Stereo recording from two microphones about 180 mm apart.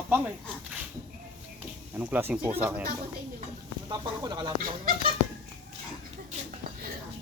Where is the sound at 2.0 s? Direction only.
10° right (ahead or behind).